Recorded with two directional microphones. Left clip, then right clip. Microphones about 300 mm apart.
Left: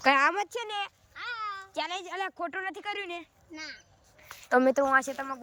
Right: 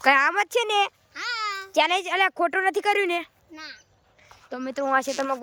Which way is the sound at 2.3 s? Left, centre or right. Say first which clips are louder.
Right 11 dB; centre.